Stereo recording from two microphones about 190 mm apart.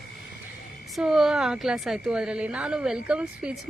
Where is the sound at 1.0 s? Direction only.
Centre (ahead or behind).